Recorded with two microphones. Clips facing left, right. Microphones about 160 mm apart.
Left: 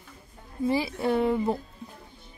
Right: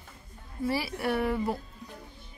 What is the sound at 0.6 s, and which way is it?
Speech, 20° left (ahead or behind).